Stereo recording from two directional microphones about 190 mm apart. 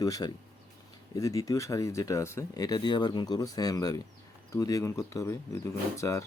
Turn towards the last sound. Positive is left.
turn(degrees=15)  # may be behind; listen again after turning